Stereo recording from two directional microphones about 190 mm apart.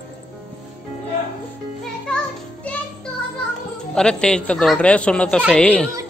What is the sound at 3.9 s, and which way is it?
A man's voice, 5° left (ahead or behind).